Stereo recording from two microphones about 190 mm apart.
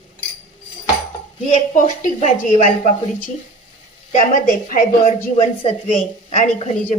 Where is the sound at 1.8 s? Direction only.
40° left (ahead or behind).